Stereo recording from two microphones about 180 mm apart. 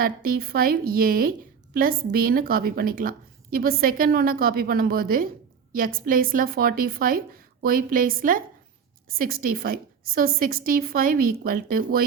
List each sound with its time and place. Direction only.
0.0 s a woman's voice: 55° right (ahead or behind)